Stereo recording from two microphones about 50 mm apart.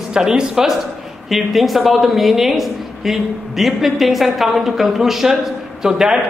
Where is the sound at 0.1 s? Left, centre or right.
Centre.